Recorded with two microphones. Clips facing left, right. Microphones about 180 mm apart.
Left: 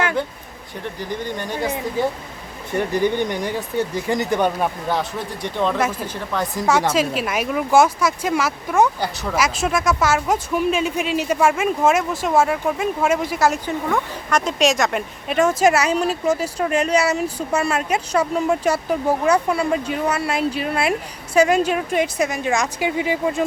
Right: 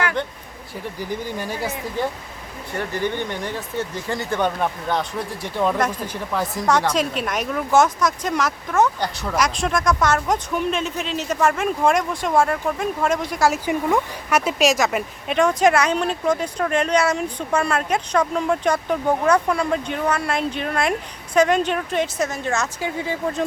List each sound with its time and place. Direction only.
0.9 s speech: 5° right (ahead or behind)
2.7 s speech: 15° left (ahead or behind); by 5.7 s 5° right (ahead or behind)
5.7 s a woman's voice: 5° left (ahead or behind)
13.7 s speech: 10° right (ahead or behind); by 23.4 s 10° left (ahead or behind)